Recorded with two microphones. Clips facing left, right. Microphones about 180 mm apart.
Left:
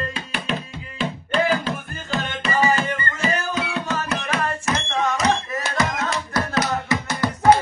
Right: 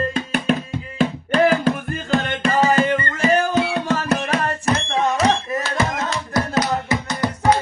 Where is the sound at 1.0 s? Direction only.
45° right (ahead or behind).